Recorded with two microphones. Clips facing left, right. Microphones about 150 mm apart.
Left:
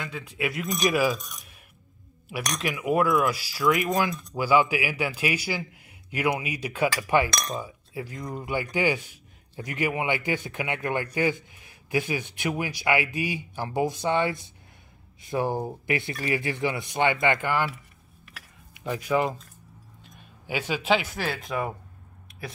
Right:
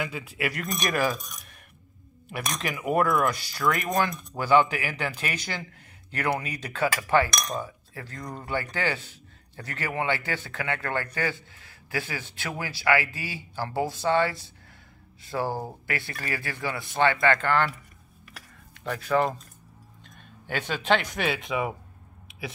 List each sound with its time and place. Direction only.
0.0 s speech: 5° right (ahead or behind)